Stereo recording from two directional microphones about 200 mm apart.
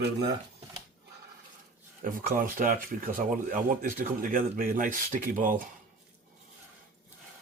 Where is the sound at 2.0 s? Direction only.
45° right (ahead or behind).